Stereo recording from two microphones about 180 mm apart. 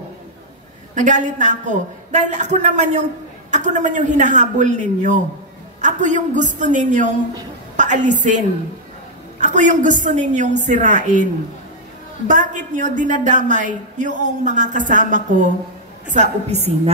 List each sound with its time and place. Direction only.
0.9 s a woman's voice: 45° right (ahead or behind)
9.4 s speech: 40° right (ahead or behind)
12.3 s a woman's voice: 45° right (ahead or behind)